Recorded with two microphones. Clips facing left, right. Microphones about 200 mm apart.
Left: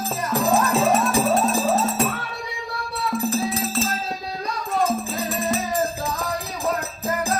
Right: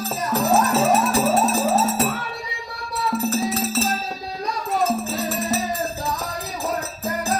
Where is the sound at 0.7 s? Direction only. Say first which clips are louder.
Right 1 dB; 5° right (ahead or behind).